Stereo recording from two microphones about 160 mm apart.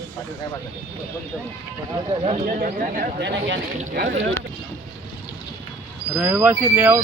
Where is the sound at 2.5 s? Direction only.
55° right (ahead or behind); by 3.6 s 90° right.